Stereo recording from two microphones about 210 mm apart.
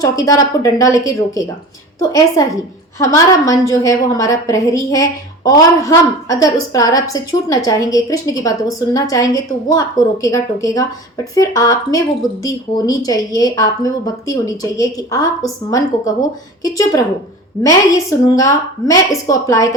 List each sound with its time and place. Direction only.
0.0 s a woman's voice: 15° left (ahead or behind)
16.6 s a woman's voice: 15° left (ahead or behind)